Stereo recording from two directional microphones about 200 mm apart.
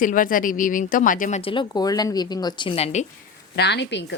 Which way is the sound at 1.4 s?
25° left (ahead or behind).